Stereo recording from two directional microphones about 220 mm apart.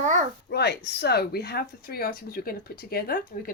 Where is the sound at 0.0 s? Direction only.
35° right (ahead or behind).